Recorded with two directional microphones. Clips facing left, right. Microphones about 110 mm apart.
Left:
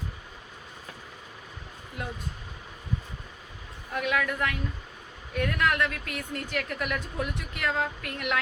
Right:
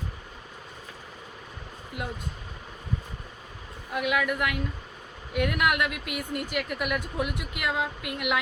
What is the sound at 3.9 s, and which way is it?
A woman's voice, 10° right (ahead or behind).